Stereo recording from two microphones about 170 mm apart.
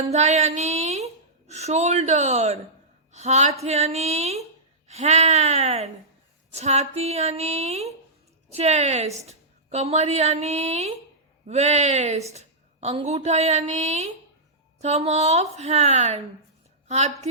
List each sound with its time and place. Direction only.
0.0 s a woman's voice: 40° right (ahead or behind)